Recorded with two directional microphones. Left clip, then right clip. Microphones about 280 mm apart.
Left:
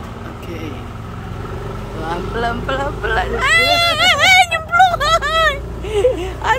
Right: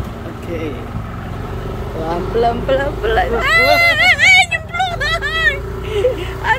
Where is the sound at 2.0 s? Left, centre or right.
Centre.